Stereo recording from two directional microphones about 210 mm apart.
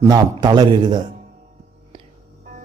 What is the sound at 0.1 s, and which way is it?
Speech, 20° right (ahead or behind).